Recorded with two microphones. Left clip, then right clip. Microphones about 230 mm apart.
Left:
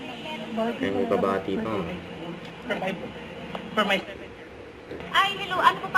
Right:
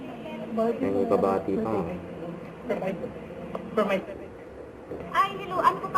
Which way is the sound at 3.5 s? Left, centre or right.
Centre.